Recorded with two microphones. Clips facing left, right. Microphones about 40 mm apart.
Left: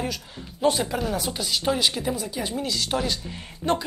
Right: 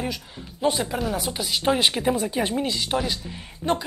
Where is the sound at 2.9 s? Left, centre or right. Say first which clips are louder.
Right 1 dB; centre.